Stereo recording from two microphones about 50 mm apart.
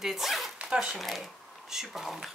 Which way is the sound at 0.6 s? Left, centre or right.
Right.